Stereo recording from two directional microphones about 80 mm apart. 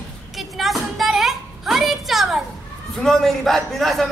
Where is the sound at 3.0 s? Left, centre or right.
Centre.